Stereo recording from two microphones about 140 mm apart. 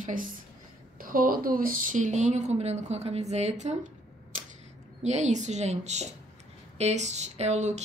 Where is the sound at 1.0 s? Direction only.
85° right; by 3.8 s 55° right (ahead or behind).